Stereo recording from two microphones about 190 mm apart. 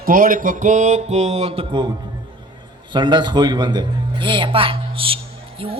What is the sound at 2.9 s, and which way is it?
A woman's voice, 25° right (ahead or behind).